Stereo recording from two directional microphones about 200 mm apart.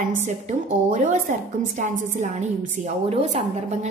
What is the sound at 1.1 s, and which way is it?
A woman's voice, 40° right (ahead or behind).